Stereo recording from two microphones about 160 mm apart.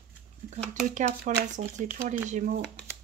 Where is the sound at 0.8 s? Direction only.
45° right (ahead or behind).